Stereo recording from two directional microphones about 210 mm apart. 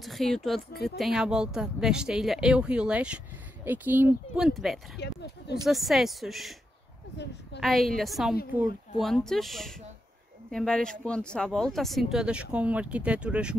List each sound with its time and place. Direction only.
0.0 s speech: centre (ahead or behind)
4.9 s speech: 50° left (ahead or behind)
5.7 s speech: centre (ahead or behind)
7.6 s speech: centre (ahead or behind)